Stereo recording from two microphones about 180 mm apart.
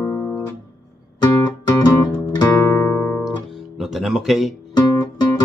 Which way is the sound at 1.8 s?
20° left (ahead or behind).